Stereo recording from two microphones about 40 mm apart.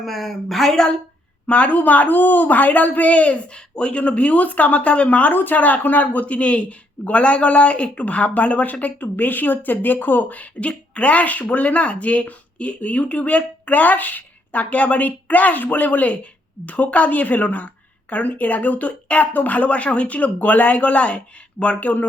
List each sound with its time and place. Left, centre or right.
0.0 s speech: centre
1.5 s speech: left
1.7 s a woman's voice: left
3.5 s a woman's voice: left